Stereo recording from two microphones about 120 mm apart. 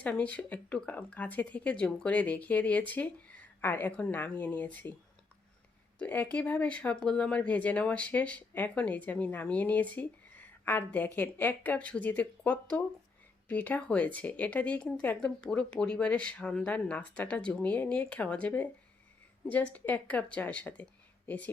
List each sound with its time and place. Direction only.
0.0 s speech: 10° left (ahead or behind)
6.0 s speech: 10° left (ahead or behind)